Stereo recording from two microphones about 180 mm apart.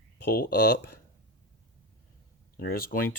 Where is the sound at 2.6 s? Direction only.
55° left (ahead or behind).